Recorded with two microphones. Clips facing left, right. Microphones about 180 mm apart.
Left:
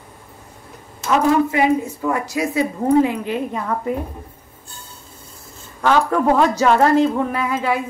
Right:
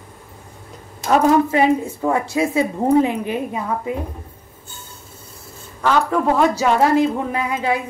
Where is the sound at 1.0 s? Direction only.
35° right (ahead or behind); by 3.9 s 10° right (ahead or behind).